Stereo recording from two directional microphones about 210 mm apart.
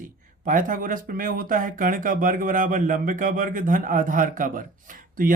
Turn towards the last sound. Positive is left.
turn(degrees=-40)  # may be behind; listen again after turning